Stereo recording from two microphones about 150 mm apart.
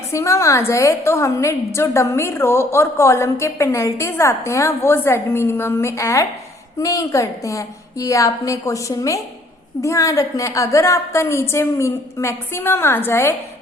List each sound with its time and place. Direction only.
0.1 s a woman's voice: 20° left (ahead or behind)